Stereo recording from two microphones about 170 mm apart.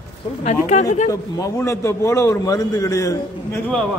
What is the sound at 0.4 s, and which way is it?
Speech, 40° left (ahead or behind).